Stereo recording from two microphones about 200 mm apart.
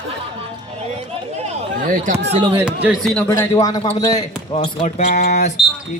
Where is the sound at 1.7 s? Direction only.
40° right (ahead or behind).